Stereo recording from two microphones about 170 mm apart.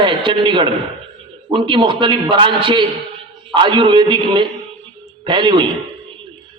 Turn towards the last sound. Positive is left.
turn(degrees=-25)  # may be behind; listen again after turning